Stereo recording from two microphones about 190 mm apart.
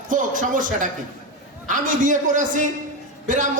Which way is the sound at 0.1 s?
45° right (ahead or behind).